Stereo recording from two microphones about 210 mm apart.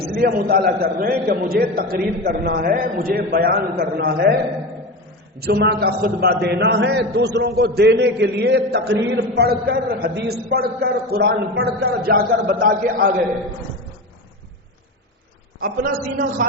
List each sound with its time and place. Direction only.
0.0 s a man's voice: 45° right (ahead or behind)
5.4 s a man's voice: 50° right (ahead or behind)
15.6 s a man's voice: 45° right (ahead or behind)